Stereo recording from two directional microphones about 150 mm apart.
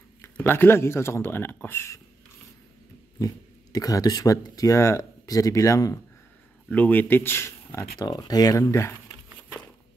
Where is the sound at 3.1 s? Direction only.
25° left (ahead or behind).